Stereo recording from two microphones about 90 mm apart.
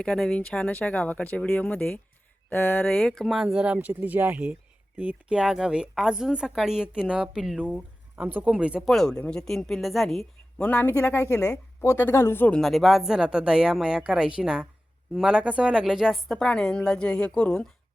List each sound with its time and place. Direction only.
0.0 s speech: 10° left (ahead or behind)
2.5 s speech: 20° left (ahead or behind)
3.0 s speech: 5° left (ahead or behind)
3.5 s speech: 15° right (ahead or behind)
8.9 s speech: 5° left (ahead or behind)
10.6 s speech: 15° left (ahead or behind)
12.5 s speech: 5° left (ahead or behind)
15.1 s speech: centre (ahead or behind)
15.4 s speech: 10° right (ahead or behind)
16.4 s speech: 10° left (ahead or behind)